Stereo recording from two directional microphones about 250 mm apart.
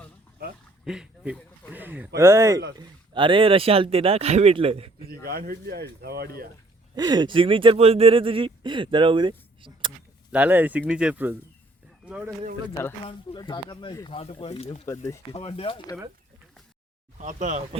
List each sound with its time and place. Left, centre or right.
0.9 s speech: centre; by 4.9 s right
5.2 s speech: right
6.9 s speech: centre
10.3 s speech: centre
13.1 s speech: centre
15.4 s speech: left
17.2 s speech: right